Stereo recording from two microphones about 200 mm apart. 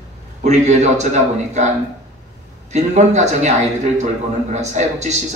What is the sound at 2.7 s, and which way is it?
Speech, 35° right (ahead or behind).